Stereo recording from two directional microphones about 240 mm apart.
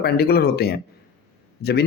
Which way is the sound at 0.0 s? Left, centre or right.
Left.